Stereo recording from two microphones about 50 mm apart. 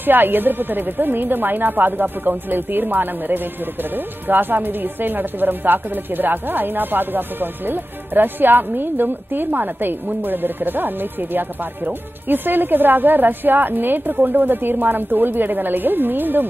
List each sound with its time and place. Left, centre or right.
0.0 s speech: right